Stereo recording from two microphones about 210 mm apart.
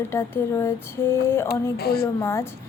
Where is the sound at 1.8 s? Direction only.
45° left (ahead or behind).